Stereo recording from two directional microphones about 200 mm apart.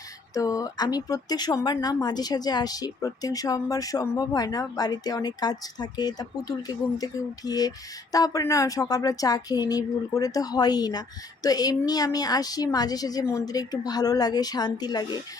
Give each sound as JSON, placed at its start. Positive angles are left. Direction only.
{"t": 0.3, "sound": "speech", "side_deg": 15}